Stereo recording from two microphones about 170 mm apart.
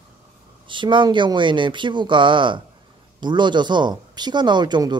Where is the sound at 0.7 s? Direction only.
30° right (ahead or behind).